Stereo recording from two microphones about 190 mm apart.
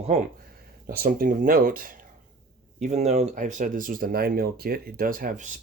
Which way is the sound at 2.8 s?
35° right (ahead or behind).